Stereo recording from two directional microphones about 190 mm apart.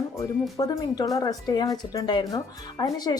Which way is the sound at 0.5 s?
20° left (ahead or behind).